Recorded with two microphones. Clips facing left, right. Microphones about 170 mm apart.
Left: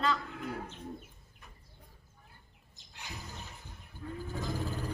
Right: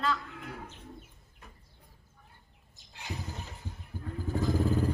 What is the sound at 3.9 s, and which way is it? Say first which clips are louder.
Vehicle: right 3 dB; 45° right (ahead or behind).